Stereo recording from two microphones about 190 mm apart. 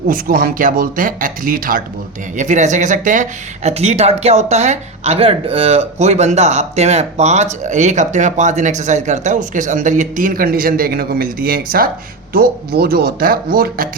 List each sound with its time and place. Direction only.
0.1 s speech: 50° right (ahead or behind)